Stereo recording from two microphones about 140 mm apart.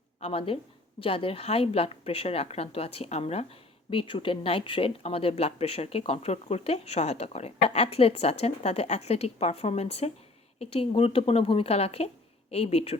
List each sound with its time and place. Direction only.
0.2 s a woman's voice: 45° left (ahead or behind)